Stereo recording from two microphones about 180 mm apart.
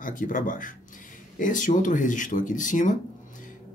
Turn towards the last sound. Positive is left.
turn(degrees=45)  # may be behind; listen again after turning